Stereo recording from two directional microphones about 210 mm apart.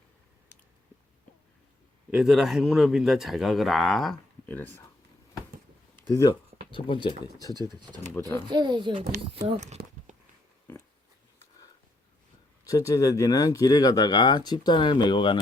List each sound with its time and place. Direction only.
2.0 s a man's voice: centre (ahead or behind)
6.1 s speech: 15° left (ahead or behind)
7.5 s a child's voice: 20° right (ahead or behind)
10.7 s a sound: 10° left (ahead or behind)
12.6 s speech: 15° left (ahead or behind)